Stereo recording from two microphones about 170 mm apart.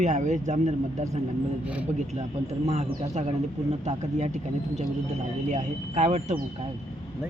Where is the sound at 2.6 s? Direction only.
40° right (ahead or behind).